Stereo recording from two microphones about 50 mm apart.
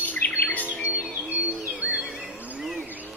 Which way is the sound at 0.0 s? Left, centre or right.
Left.